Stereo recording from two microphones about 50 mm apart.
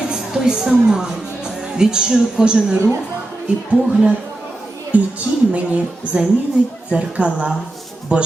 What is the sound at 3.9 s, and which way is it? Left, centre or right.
Speech, centre.